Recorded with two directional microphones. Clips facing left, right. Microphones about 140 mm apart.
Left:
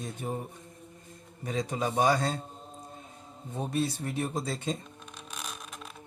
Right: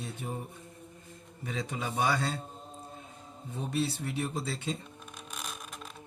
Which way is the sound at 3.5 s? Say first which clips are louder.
Left 2 dB; 45° left (ahead or behind).